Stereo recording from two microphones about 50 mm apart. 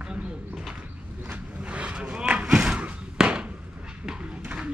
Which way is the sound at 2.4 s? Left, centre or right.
Centre.